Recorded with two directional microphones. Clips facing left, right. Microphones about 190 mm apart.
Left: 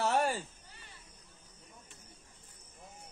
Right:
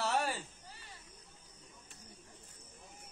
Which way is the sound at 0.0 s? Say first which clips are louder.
Left 4 dB; 50° left (ahead or behind).